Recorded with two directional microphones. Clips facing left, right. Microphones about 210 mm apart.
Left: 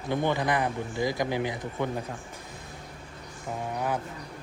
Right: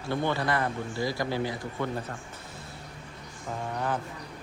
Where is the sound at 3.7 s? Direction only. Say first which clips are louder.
Left 1 dB; 10° left (ahead or behind).